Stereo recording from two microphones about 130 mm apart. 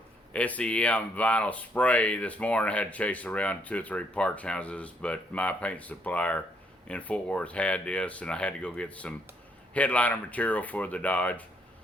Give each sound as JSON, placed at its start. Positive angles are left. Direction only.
{"t": 0.3, "sound": "speech", "side_deg": 10}